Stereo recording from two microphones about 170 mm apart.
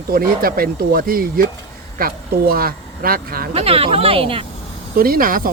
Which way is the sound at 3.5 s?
35° right (ahead or behind).